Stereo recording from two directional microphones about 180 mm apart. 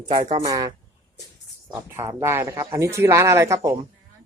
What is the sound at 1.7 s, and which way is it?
Speech, 15° right (ahead or behind).